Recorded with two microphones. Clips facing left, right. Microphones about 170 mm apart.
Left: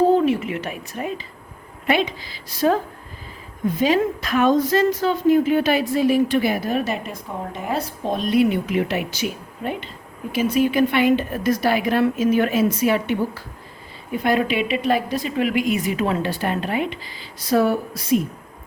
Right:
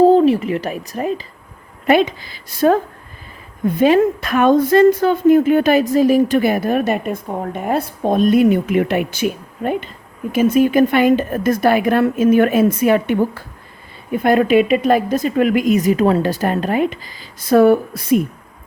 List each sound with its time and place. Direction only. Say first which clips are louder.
0.0 s speech: right 6 dB; 35° right (ahead or behind); by 2.7 s 55° right (ahead or behind)
3.8 s speech: right 7 dB; 55° right (ahead or behind)